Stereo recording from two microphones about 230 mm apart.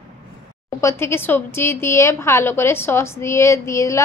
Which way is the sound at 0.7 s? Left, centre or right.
Centre.